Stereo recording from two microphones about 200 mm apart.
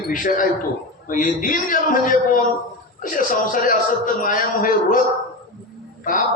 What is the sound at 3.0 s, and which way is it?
Mantra, 40° left (ahead or behind).